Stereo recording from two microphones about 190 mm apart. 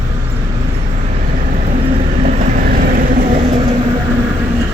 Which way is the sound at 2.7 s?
50° right (ahead or behind).